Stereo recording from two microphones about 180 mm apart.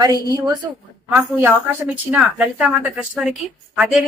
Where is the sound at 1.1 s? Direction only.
10° right (ahead or behind).